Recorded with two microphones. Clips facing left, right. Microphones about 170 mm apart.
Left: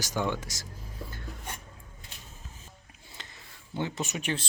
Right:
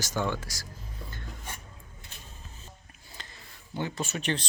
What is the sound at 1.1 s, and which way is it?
Filing, 5° left (ahead or behind).